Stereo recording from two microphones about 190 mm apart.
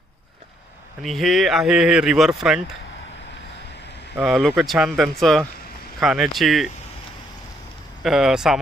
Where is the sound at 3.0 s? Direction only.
70° left (ahead or behind).